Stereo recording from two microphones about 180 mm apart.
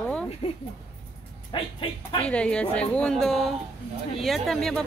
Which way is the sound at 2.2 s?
5° left (ahead or behind).